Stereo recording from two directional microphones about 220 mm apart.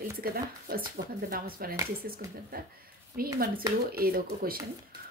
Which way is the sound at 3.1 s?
40° right (ahead or behind).